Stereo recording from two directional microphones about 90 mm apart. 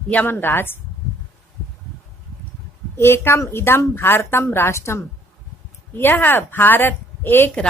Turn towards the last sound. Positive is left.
turn(degrees=20)  # may be behind; listen again after turning